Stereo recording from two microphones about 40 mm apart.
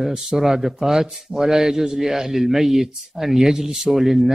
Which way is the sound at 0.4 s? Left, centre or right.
Centre.